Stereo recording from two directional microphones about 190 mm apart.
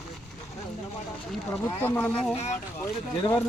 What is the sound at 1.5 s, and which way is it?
Speech, 15° left (ahead or behind).